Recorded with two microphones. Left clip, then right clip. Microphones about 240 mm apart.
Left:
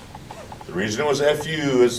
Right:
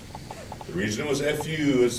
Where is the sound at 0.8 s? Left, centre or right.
Centre.